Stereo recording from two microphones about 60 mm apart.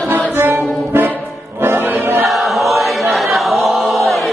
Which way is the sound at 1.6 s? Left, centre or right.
Right.